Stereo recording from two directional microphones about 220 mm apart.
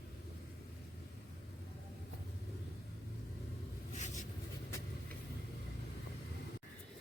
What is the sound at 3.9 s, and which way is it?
Writing, 35° left (ahead or behind).